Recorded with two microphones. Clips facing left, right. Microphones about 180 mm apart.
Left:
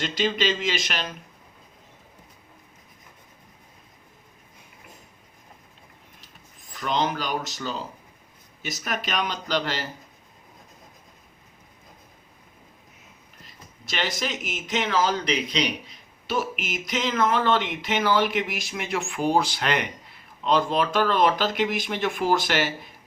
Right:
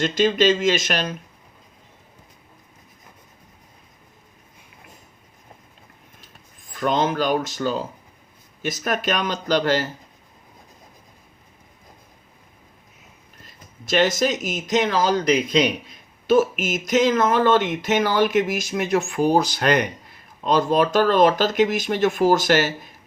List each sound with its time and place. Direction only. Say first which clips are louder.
0.0 s speech: right 7 dB; 45° right (ahead or behind)
6.7 s speech: right 5 dB; 50° right (ahead or behind)
13.4 s speech: right 3 dB; 45° right (ahead or behind)